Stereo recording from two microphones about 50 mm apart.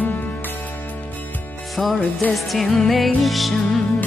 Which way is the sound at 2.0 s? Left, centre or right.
Left.